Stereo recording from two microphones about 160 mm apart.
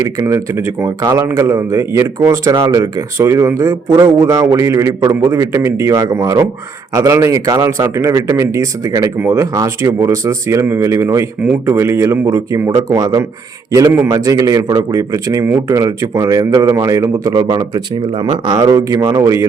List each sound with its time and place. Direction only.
0.2 s a man's voice: 20° right (ahead or behind)